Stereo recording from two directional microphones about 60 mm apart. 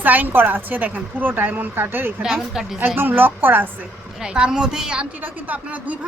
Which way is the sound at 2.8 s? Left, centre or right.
Right.